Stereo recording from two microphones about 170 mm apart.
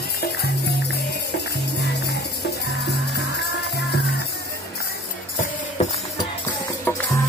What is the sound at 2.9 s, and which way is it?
Music, 75° left (ahead or behind).